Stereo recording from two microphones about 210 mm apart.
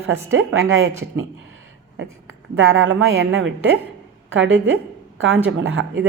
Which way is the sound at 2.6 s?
70° right (ahead or behind).